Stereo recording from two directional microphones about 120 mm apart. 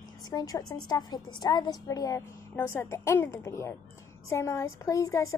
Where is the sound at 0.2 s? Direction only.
35° left (ahead or behind).